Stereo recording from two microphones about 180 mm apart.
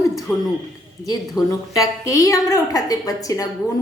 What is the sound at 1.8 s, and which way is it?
A woman's voice, 20° left (ahead or behind).